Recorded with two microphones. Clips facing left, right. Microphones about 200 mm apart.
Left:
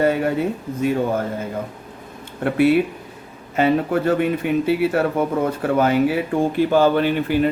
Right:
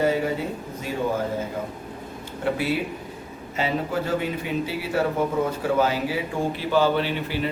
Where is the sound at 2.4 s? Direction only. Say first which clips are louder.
Left 8 dB; 60° left (ahead or behind).